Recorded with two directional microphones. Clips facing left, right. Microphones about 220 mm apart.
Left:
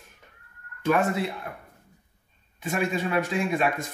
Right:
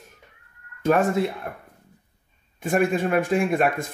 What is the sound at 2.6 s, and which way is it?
A man's voice, 50° right (ahead or behind).